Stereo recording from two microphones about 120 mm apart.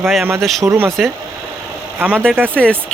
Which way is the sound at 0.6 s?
25° right (ahead or behind).